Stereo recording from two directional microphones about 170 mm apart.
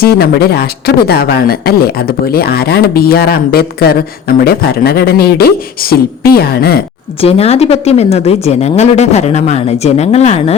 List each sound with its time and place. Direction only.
0.0 s speech: 65° left (ahead or behind)
7.2 s a woman's voice: 35° left (ahead or behind)